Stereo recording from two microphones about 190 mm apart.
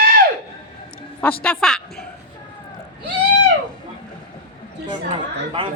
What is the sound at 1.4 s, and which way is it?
Speech, 5° left (ahead or behind).